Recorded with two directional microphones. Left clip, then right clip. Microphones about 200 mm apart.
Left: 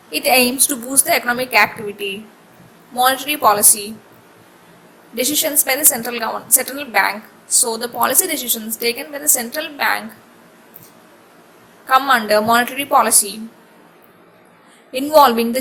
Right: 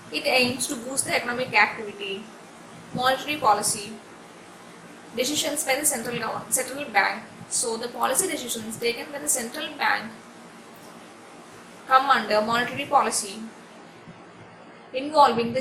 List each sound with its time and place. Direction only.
0.1 s a woman's voice: 50° left (ahead or behind)
3.0 s a woman's voice: 50° left (ahead or behind)
5.1 s a woman's voice: 45° left (ahead or behind)
11.9 s a woman's voice: 50° left (ahead or behind)
14.9 s a woman's voice: 50° left (ahead or behind)